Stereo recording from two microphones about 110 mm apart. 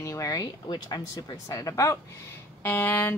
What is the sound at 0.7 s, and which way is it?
A woman's voice, 35° left (ahead or behind).